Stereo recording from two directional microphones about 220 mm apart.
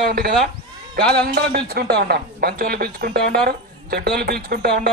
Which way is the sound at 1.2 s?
45° right (ahead or behind).